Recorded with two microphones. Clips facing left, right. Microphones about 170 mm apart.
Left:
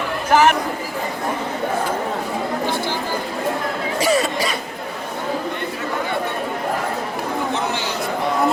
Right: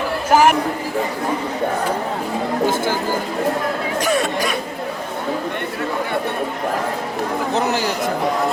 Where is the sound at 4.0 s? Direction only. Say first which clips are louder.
Left 2 dB; 5° left (ahead or behind).